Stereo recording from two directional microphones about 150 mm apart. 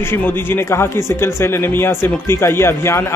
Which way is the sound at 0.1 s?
15° left (ahead or behind).